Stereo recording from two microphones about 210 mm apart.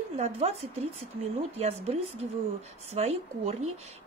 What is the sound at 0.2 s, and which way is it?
Speech, 30° right (ahead or behind).